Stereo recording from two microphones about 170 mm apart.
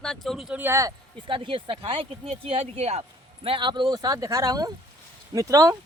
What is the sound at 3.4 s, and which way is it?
Speech, 30° right (ahead or behind).